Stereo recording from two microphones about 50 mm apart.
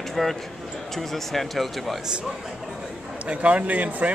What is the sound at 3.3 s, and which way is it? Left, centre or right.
Speech, right.